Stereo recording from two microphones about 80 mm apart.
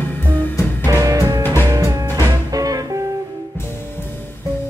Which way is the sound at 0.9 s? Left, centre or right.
Right.